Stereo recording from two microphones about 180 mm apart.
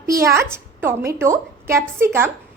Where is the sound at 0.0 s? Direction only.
15° right (ahead or behind).